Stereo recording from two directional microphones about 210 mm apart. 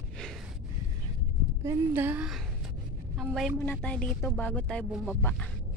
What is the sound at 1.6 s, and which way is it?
A woman's voice, 10° right (ahead or behind).